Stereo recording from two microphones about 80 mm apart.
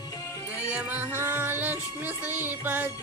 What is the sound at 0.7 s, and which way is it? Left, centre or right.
Music, centre.